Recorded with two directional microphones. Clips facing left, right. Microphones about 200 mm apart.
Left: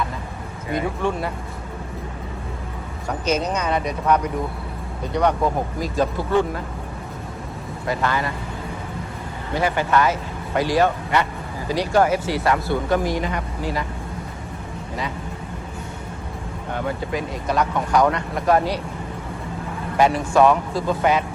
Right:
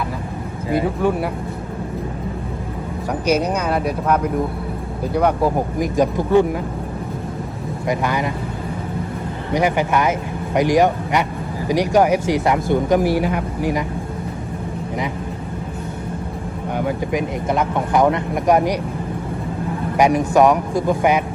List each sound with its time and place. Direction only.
1.0 s speech: 10° right (ahead or behind)
3.1 s speech: 10° right (ahead or behind)
7.9 s speech: 15° right (ahead or behind)
9.5 s speech: 15° right (ahead or behind)
16.7 s speech: 15° right (ahead or behind)
20.0 s speech: 15° right (ahead or behind)